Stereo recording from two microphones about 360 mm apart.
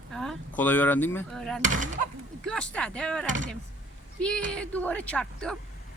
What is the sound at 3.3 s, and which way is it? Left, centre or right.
Speech, right.